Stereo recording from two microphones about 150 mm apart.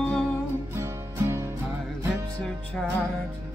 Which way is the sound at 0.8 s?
15° right (ahead or behind).